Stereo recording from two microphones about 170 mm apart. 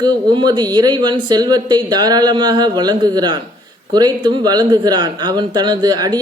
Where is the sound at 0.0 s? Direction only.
25° right (ahead or behind).